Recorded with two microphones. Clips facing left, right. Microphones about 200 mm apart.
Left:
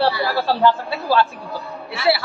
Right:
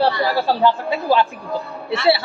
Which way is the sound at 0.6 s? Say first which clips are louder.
Even; 15° right (ahead or behind).